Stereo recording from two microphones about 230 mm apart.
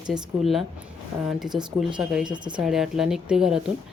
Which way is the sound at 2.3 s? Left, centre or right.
Centre.